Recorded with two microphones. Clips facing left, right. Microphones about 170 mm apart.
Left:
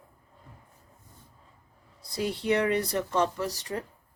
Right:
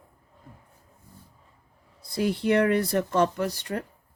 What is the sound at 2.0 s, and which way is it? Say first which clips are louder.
Speech: right 5 dB; 50° right (ahead or behind).